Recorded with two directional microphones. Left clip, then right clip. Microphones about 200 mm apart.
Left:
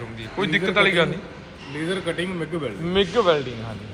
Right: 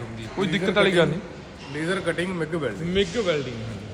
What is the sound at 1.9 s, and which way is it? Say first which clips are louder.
Speech: right 1 dB; 5° right (ahead or behind).